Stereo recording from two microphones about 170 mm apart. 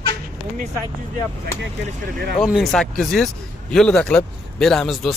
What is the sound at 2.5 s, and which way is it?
Speech, centre (ahead or behind).